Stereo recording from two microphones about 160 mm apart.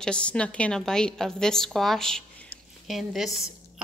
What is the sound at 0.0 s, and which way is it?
Speech, 5° left (ahead or behind).